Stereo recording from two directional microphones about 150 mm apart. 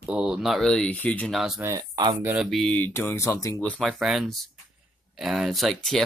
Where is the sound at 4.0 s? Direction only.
Centre (ahead or behind).